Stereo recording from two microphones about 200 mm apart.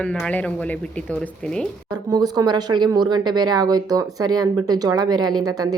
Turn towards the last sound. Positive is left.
turn(degrees=-20)  # may be behind; listen again after turning